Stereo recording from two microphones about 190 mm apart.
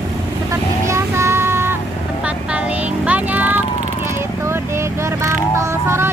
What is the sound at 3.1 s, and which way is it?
Vehicle, 10° right (ahead or behind).